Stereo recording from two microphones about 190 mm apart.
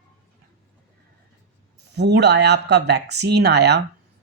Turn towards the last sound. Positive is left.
turn(degrees=-60)  # may be behind; listen again after turning